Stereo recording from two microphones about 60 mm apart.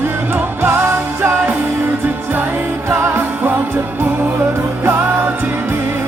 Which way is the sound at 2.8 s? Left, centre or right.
Right.